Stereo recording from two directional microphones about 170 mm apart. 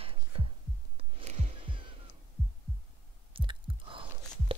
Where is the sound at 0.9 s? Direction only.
40° right (ahead or behind).